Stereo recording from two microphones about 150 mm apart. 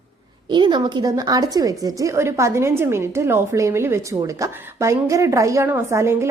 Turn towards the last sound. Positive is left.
turn(degrees=-20)  # may be behind; listen again after turning